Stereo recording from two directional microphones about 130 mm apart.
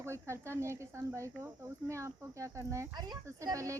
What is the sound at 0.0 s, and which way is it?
Speech, 20° right (ahead or behind).